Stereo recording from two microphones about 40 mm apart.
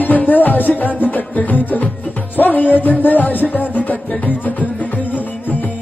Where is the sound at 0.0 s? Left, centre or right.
Left.